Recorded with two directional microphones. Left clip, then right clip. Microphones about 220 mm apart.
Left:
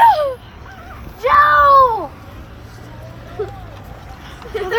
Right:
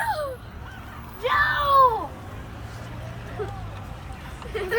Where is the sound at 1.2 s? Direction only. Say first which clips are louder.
Left 11 dB; 40° left (ahead or behind).